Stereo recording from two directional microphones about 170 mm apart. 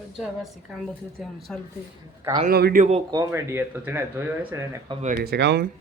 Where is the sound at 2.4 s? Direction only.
60° right (ahead or behind).